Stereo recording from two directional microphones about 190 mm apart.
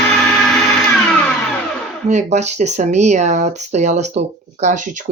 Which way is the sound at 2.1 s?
40° right (ahead or behind).